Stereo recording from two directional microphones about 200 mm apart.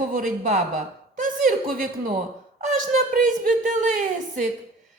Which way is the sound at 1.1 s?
40° right (ahead or behind).